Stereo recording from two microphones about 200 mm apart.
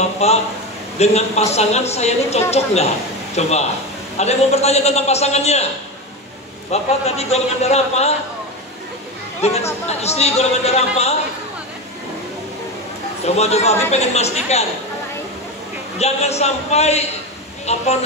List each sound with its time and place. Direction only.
0.2 s a man's voice: 30° left (ahead or behind)
6.7 s a man's voice: 30° left (ahead or behind)
9.4 s a man's voice: 30° left (ahead or behind)
13.2 s a man's voice: 30° left (ahead or behind)
16.0 s a man's voice: 30° left (ahead or behind)